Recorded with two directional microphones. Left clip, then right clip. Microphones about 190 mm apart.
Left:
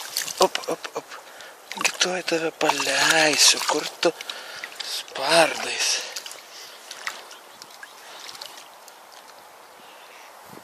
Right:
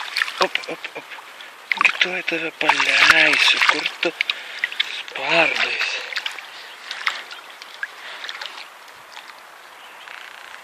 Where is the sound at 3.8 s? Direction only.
25° left (ahead or behind).